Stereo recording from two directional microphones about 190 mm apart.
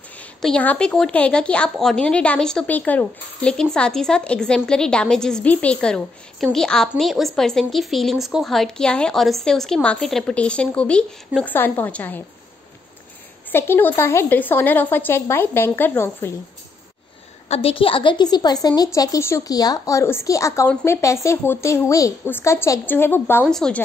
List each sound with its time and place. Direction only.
0.2 s a woman's voice: 5° left (ahead or behind)
13.5 s a woman's voice: 10° left (ahead or behind)
17.5 s a woman's voice: 30° left (ahead or behind); by 23.8 s 5° left (ahead or behind)